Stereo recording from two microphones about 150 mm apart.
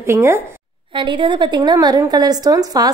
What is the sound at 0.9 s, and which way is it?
A woman's voice, 35° right (ahead or behind).